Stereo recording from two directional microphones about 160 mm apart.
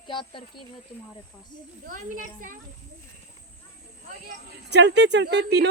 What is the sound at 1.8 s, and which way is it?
Speech, 55° right (ahead or behind).